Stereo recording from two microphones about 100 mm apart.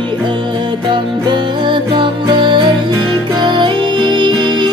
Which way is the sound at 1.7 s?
50° right (ahead or behind).